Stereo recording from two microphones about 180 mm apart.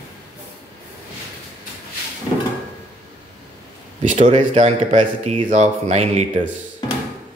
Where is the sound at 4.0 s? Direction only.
45° right (ahead or behind).